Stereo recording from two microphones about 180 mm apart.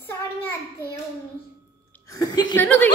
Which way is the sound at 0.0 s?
10° left (ahead or behind).